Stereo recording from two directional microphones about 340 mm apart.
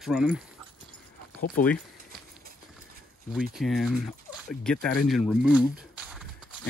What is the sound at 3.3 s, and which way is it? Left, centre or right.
Speech, centre.